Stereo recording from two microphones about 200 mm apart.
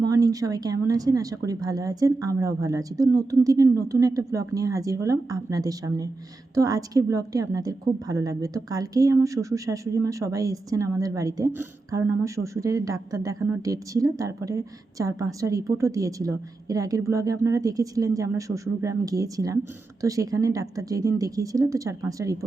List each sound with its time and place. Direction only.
0.0 s a woman's voice: 20° right (ahead or behind)